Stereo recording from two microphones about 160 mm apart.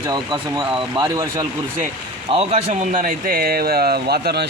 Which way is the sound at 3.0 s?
65° right (ahead or behind).